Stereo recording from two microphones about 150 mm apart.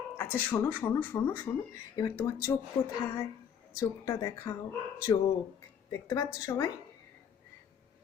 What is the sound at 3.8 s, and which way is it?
Speech, 25° left (ahead or behind).